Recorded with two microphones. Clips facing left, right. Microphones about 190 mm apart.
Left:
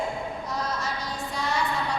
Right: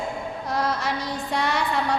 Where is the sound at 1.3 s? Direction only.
65° right (ahead or behind).